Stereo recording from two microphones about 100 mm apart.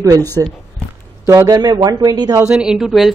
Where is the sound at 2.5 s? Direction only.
5° right (ahead or behind).